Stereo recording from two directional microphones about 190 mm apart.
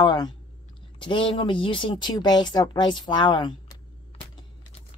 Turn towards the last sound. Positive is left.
turn(degrees=25)  # may be behind; listen again after turning